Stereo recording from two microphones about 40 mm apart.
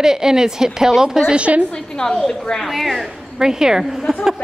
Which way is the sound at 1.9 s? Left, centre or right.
Left.